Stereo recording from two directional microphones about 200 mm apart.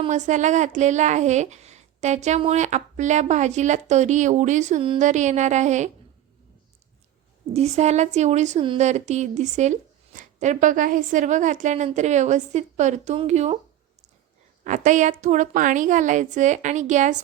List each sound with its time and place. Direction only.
0.0 s a woman's voice: 35° right (ahead or behind)
7.5 s a woman's voice: 35° right (ahead or behind)
14.6 s a woman's voice: 40° right (ahead or behind)